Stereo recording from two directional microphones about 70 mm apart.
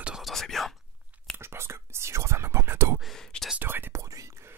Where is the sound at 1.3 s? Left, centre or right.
Right.